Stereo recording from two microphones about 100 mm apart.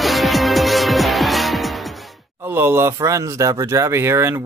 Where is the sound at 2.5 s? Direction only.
25° right (ahead or behind).